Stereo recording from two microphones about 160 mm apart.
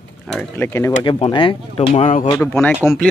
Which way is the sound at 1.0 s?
30° left (ahead or behind).